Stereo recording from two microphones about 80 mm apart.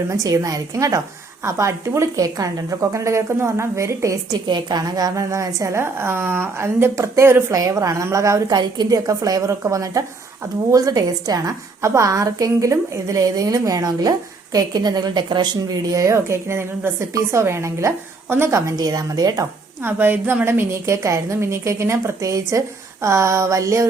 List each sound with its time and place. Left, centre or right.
0.1 s a woman's voice: right
4.4 s a woman's voice: right
4.8 s a woman's voice: right
8.4 s a woman's voice: right
9.0 s a woman's voice: right
18.8 s a woman's voice: right
19.8 s a woman's voice: right